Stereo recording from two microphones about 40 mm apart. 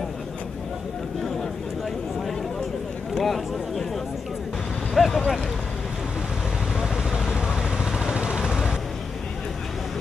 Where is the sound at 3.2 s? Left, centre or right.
Centre.